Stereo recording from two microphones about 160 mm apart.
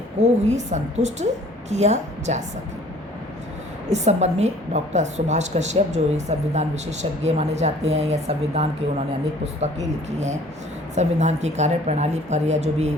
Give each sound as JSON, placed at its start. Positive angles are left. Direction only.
{"t": 0.2, "sound": "a woman's voice", "side_deg": -45}
{"t": 3.8, "sound": "a woman's voice", "side_deg": -45}